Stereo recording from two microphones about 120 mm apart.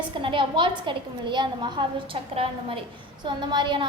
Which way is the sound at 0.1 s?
45° right (ahead or behind).